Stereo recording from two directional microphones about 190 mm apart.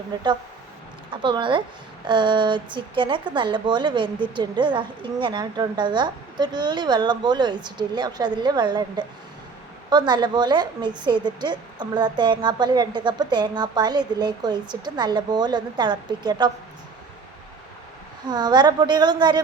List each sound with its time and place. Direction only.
1.1 s a woman's voice: 25° right (ahead or behind)
18.3 s a woman's voice: 20° right (ahead or behind)